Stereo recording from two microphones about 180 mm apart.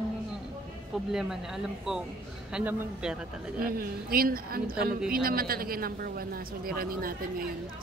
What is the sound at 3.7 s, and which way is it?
A woman's voice, 55° right (ahead or behind).